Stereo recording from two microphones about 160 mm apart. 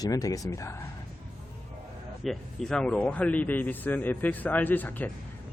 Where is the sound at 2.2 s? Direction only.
5° left (ahead or behind).